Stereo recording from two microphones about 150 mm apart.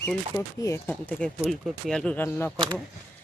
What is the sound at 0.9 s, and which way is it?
Speech, 5° left (ahead or behind).